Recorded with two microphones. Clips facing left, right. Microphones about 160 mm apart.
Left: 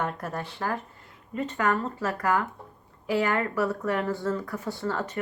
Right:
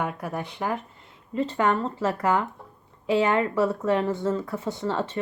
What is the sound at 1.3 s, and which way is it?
Speech, 30° right (ahead or behind).